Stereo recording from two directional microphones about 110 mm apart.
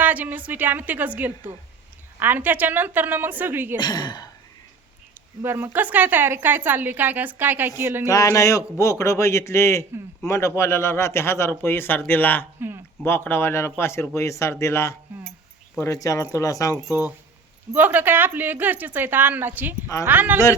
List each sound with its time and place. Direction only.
0.0 s a woman's voice: 15° right (ahead or behind)
3.8 s speech: 40° left (ahead or behind)
5.4 s a woman's voice: 20° right (ahead or behind)
8.0 s speech: 30° left (ahead or behind)
12.5 s speech: 20° right (ahead or behind)
13.1 s speech: 20° left (ahead or behind)
17.7 s a woman's voice: 15° right (ahead or behind)